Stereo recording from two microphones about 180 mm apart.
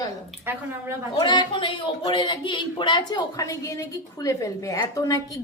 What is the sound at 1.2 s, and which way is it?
Speech, 25° left (ahead or behind).